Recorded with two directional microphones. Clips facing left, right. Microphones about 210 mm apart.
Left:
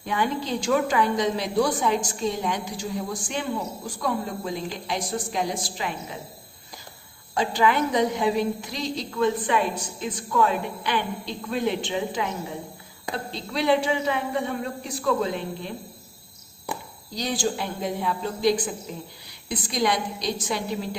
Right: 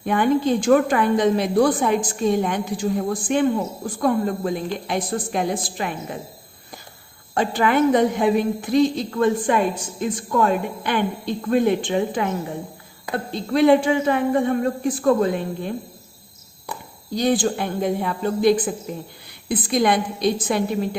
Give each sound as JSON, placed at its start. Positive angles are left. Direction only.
{"t": 0.0, "sound": "a woman's voice", "side_deg": -55}
{"t": 7.3, "sound": "a woman's voice", "side_deg": -55}
{"t": 13.3, "sound": "a woman's voice", "side_deg": -50}
{"t": 17.2, "sound": "a woman's voice", "side_deg": -55}